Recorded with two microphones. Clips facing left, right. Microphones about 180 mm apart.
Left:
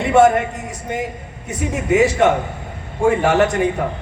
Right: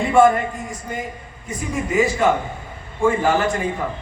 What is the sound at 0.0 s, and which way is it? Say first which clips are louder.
A man's voice: left 2 dB; 75° left (ahead or behind).